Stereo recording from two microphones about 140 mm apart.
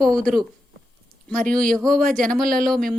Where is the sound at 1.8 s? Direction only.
5° left (ahead or behind).